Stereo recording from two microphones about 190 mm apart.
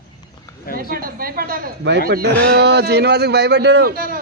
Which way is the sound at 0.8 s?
50° right (ahead or behind).